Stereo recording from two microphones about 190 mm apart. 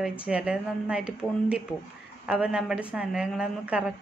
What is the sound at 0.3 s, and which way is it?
A woman's voice, 5° right (ahead or behind).